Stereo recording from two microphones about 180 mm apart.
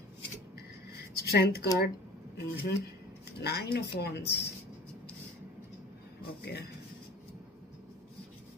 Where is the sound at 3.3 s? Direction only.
65° left (ahead or behind).